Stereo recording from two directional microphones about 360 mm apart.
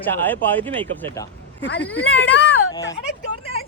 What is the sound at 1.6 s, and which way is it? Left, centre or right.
Speech, left.